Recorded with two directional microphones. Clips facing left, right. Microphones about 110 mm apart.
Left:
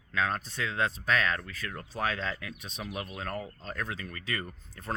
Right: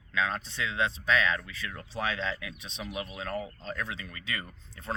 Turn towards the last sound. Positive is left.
turn(degrees=40)  # may be behind; listen again after turning